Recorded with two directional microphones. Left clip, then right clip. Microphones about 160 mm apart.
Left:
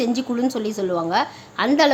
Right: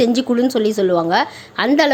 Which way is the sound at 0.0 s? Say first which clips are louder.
Right 7 dB; 25° right (ahead or behind).